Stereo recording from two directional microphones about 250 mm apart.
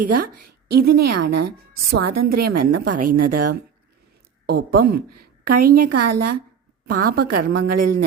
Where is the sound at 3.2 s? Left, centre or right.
Right.